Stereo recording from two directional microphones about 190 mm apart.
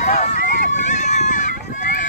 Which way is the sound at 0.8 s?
40° left (ahead or behind).